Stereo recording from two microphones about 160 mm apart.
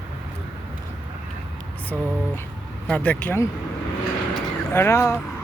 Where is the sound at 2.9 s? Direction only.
5° left (ahead or behind).